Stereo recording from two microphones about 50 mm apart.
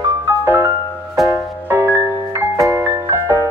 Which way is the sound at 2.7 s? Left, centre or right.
Right.